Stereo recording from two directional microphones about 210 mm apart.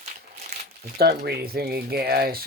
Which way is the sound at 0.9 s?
50° right (ahead or behind).